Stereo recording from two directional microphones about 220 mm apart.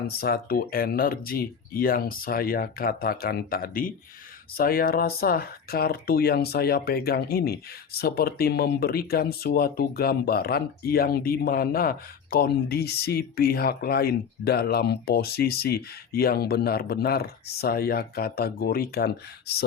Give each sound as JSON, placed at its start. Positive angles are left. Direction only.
{"t": 0.2, "sound": "speech", "side_deg": 45}